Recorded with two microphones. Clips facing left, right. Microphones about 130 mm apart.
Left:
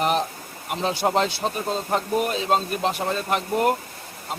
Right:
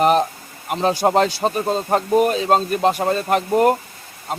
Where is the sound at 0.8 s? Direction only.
45° right (ahead or behind).